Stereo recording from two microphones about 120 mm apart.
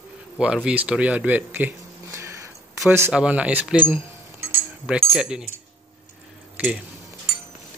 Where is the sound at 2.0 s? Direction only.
25° right (ahead or behind).